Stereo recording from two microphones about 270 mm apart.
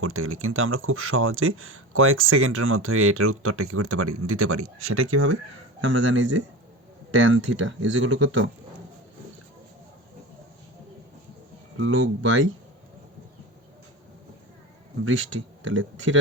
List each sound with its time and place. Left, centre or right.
0.0 s speech: right
11.8 s speech: right
15.0 s speech: right